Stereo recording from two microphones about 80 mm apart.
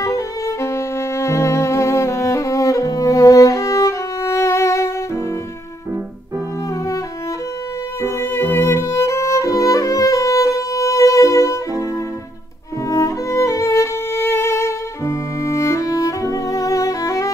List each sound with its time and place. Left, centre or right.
0.0 s music: left
8.0 s violin: left
12.9 s music: left